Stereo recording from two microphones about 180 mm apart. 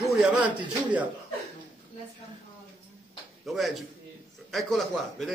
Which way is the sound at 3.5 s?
Centre (ahead or behind).